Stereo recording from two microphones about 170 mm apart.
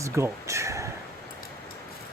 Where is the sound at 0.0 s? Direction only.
15° right (ahead or behind).